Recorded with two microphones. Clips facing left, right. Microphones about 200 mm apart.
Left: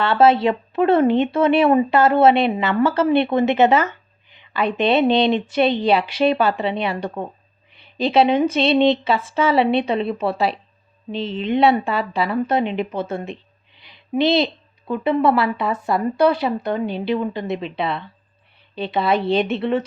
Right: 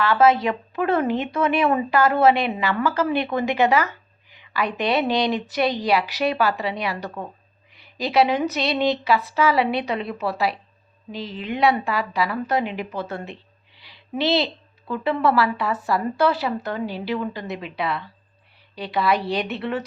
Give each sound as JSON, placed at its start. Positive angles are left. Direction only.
{"t": 0.0, "sound": "a woman's voice", "side_deg": 30}